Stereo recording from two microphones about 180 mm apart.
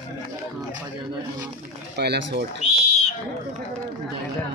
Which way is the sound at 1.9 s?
65° right (ahead or behind).